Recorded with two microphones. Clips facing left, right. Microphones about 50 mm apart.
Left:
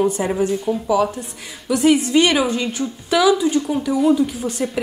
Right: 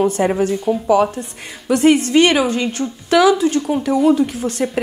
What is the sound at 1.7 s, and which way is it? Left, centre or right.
A woman's voice, right.